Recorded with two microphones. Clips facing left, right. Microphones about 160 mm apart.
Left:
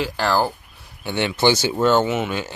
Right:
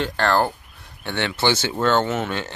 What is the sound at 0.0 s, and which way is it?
Speech, 5° left (ahead or behind).